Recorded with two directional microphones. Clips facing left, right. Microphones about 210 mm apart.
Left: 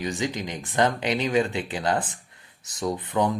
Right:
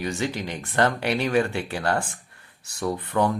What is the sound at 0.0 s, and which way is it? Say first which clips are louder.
Speech: right 1 dB; 15° left (ahead or behind).